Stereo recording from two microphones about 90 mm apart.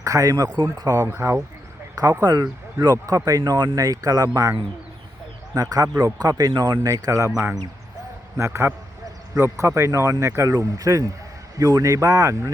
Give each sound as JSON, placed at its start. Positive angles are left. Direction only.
{"t": 0.0, "sound": "a man's voice", "side_deg": -40}
{"t": 1.0, "sound": "speech", "side_deg": -30}
{"t": 2.2, "sound": "a man's voice", "side_deg": -45}
{"t": 5.5, "sound": "a man's voice", "side_deg": -45}
{"t": 7.3, "sound": "a man's voice", "side_deg": -25}